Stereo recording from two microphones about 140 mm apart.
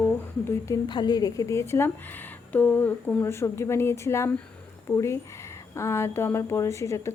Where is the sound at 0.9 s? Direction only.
30° left (ahead or behind).